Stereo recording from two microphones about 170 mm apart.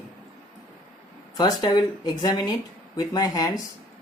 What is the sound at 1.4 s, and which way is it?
Speech, 25° left (ahead or behind).